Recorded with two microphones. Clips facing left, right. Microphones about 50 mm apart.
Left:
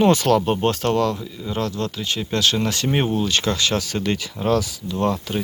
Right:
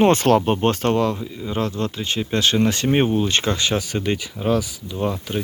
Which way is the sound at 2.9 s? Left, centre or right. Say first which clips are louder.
Right 2 dB; centre.